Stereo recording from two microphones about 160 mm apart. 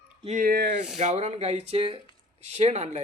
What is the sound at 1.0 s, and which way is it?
Speech, 40° right (ahead or behind).